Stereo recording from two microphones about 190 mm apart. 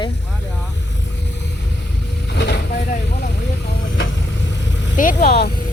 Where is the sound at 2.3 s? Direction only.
60° left (ahead or behind).